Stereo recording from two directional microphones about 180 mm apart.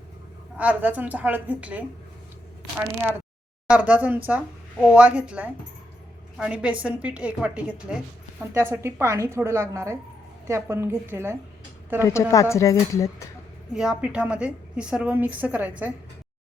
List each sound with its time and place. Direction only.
0.5 s a woman's voice: 10° right (ahead or behind)
3.7 s a woman's voice: 5° right (ahead or behind)
12.0 s speech: 20° left (ahead or behind)
13.7 s a woman's voice: 5° right (ahead or behind)